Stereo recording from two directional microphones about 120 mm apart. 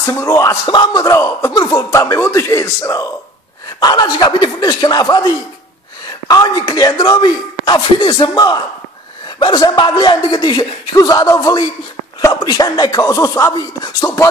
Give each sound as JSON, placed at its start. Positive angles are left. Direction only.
{"t": 0.0, "sound": "speech", "side_deg": 25}
{"t": 0.7, "sound": "speech", "side_deg": 40}